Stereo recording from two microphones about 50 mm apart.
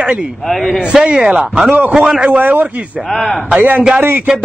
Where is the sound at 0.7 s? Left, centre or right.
Centre.